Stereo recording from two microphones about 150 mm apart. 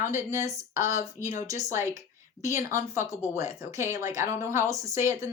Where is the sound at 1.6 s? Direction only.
20° right (ahead or behind).